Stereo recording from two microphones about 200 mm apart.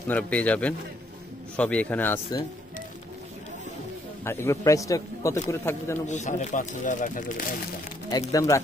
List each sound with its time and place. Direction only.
0.1 s speech: 5° left (ahead or behind)
4.2 s speech: 10° left (ahead or behind)
6.0 s speech: 35° left (ahead or behind)
8.1 s speech: 15° left (ahead or behind)